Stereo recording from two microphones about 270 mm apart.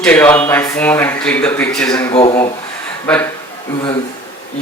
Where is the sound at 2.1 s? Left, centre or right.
Left.